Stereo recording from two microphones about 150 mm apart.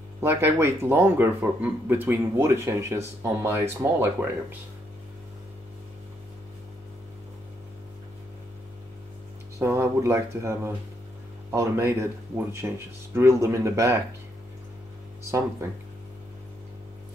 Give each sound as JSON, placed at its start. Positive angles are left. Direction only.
{"t": 0.2, "sound": "speech", "side_deg": -15}
{"t": 9.6, "sound": "speech", "side_deg": -15}